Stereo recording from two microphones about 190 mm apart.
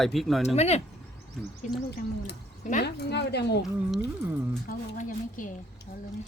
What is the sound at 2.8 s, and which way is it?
Speech, 60° left (ahead or behind).